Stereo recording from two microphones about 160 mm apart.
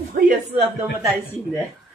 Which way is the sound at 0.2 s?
70° right (ahead or behind).